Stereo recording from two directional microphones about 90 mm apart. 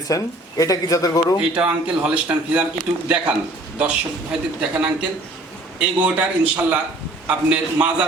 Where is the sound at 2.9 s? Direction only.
15° right (ahead or behind).